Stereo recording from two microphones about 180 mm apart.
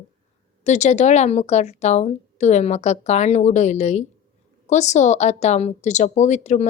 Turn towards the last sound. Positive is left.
turn(degrees=40)  # may be behind; listen again after turning